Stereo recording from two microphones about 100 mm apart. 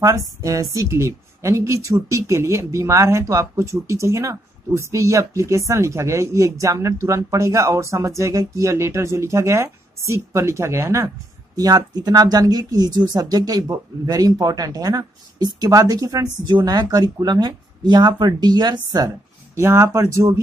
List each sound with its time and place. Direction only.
0.0 s a woman's voice: 30° right (ahead or behind)
19.5 s speech: 30° right (ahead or behind)